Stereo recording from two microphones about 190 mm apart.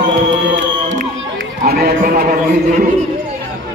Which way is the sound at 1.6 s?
55° right (ahead or behind).